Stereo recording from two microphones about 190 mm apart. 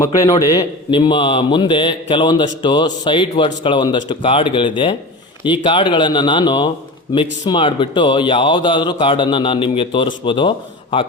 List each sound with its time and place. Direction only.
0.0 s a man's voice: 20° left (ahead or behind)